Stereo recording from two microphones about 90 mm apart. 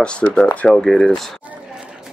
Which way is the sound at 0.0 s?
10° left (ahead or behind).